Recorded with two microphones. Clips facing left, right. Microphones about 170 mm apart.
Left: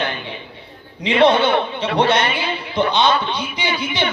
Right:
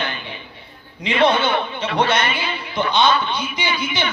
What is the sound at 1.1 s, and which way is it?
A man's voice, 30° left (ahead or behind).